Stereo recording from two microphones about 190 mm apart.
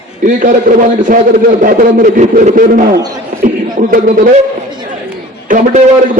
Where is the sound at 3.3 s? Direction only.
45° right (ahead or behind).